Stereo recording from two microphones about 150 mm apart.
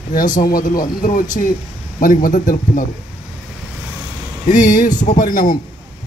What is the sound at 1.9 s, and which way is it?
Speech, 65° left (ahead or behind).